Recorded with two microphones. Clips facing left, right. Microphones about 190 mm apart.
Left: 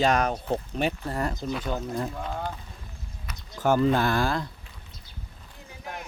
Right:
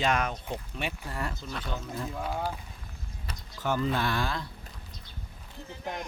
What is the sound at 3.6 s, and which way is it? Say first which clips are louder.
Speech: left 7 dB; 45° left (ahead or behind).